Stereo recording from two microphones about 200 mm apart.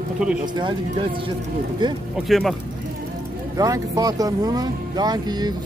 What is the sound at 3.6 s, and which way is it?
Speech, 20° right (ahead or behind).